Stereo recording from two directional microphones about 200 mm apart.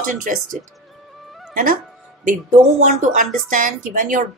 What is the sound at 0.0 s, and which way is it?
Speech, 40° right (ahead or behind).